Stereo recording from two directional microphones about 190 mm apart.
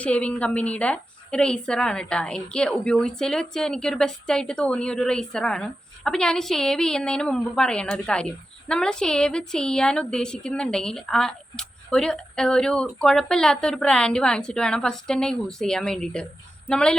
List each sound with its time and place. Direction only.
0.0 s a woman's voice: 5° left (ahead or behind)